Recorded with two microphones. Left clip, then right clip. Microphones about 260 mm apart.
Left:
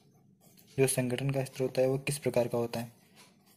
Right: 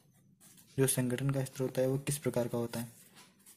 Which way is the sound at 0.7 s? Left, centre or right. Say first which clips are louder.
Left 3 dB; centre.